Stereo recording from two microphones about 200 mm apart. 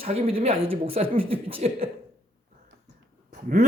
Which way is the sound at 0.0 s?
30° right (ahead or behind).